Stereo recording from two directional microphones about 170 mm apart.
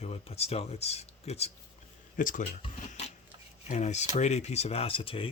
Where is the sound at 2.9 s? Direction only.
40° left (ahead or behind).